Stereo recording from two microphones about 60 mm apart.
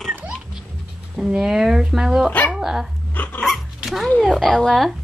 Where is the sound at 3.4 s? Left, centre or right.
Centre.